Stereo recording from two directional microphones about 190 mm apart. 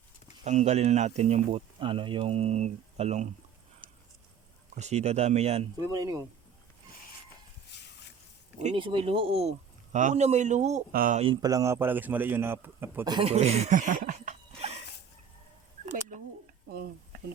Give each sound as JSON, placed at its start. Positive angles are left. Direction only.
{"t": 0.4, "sound": "speech", "side_deg": -35}
{"t": 4.7, "sound": "speech", "side_deg": -35}
{"t": 6.0, "sound": "a man's voice", "side_deg": -15}
{"t": 7.7, "sound": "a sound", "side_deg": 65}
{"t": 8.7, "sound": "speech", "side_deg": -25}
{"t": 11.2, "sound": "a man's voice", "side_deg": -25}
{"t": 13.1, "sound": "speech", "side_deg": -30}
{"t": 15.9, "sound": "bird", "side_deg": -40}
{"t": 16.6, "sound": "a sound", "side_deg": -55}